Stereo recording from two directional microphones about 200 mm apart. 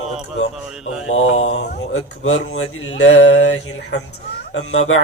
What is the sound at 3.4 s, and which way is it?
Mantra, 65° left (ahead or behind).